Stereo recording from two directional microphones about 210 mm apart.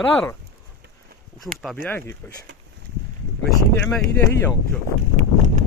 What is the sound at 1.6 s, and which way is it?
Speech, 5° left (ahead or behind).